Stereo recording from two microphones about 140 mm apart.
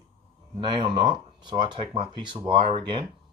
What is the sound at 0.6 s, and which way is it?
Speech, 35° right (ahead or behind).